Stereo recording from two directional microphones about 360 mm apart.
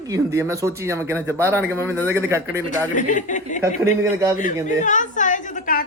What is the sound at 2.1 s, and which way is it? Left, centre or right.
Speech, centre.